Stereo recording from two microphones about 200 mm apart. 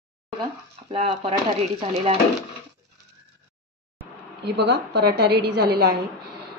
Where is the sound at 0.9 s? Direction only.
25° right (ahead or behind).